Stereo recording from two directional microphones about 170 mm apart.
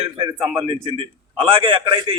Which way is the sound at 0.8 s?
35° right (ahead or behind).